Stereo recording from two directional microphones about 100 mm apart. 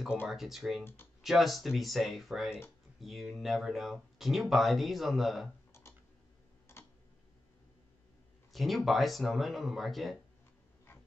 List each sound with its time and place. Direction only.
0.3 s speech: centre (ahead or behind)
5.7 s a sound: 25° left (ahead or behind)
8.5 s speech: centre (ahead or behind)